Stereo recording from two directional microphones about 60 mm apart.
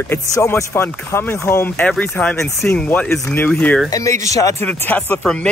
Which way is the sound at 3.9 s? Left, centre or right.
Left.